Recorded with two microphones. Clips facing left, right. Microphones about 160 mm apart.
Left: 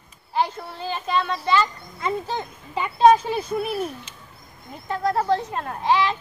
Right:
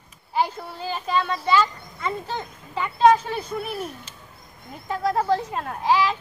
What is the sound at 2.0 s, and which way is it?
Speech, 15° left (ahead or behind).